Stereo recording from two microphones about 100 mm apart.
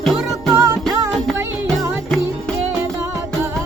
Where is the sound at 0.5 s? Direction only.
25° right (ahead or behind).